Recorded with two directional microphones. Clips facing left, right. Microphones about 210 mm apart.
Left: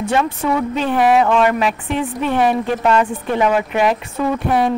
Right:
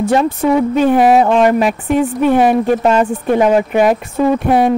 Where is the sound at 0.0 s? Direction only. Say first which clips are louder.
Right 5 dB; 35° right (ahead or behind).